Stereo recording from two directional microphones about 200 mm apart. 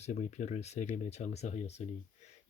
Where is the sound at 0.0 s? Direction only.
35° left (ahead or behind).